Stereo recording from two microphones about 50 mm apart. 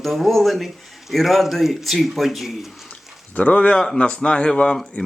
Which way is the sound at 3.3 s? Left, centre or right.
Left.